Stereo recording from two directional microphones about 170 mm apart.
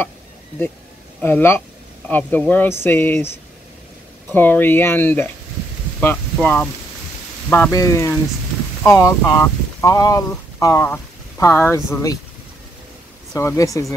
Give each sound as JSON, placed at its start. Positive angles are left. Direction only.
{"t": 1.2, "sound": "speech", "side_deg": 10}
{"t": 4.3, "sound": "speech", "side_deg": 10}
{"t": 13.3, "sound": "speech", "side_deg": 20}